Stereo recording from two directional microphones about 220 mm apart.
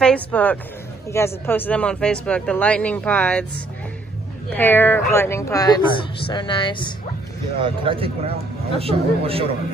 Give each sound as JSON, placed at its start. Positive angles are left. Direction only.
{"t": 0.0, "sound": "speech", "side_deg": 5}
{"t": 4.6, "sound": "speech", "side_deg": 10}
{"t": 7.6, "sound": "speech", "side_deg": -25}